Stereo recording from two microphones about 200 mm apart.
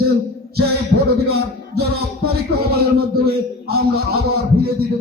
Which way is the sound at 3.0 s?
50° right (ahead or behind).